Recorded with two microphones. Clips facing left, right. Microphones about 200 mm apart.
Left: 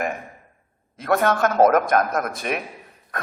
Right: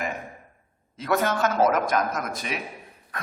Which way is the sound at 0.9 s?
55° left (ahead or behind).